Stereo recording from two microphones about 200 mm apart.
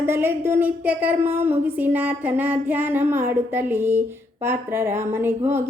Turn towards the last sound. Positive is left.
turn(degrees=-10)  # may be behind; listen again after turning